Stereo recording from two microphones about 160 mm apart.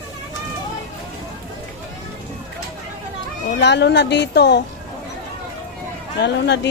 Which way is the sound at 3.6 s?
90° left.